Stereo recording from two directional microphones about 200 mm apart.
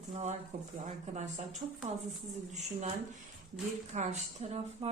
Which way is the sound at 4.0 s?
30° right (ahead or behind).